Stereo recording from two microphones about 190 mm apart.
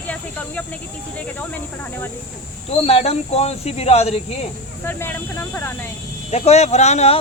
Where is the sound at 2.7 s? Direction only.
35° left (ahead or behind).